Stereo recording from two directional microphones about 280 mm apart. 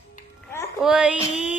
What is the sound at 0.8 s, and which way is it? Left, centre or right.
Speech, centre.